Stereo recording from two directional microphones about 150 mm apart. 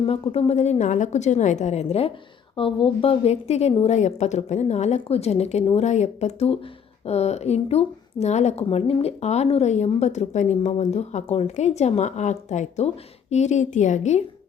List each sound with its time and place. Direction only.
0.0 s a woman's voice: 40° left (ahead or behind)